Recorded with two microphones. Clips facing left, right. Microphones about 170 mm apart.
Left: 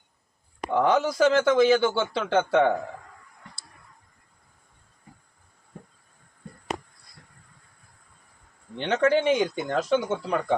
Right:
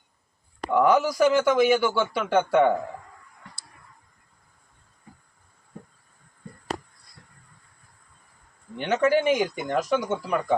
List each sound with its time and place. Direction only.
0.7 s speech: 25° left (ahead or behind)
8.7 s speech: 25° left (ahead or behind)